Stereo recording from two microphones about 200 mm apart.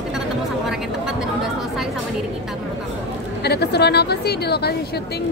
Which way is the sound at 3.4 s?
55° left (ahead or behind).